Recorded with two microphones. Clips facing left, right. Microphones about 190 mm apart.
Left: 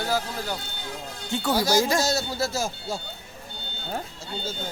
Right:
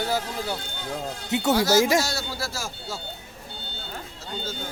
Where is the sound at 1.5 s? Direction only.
15° left (ahead or behind).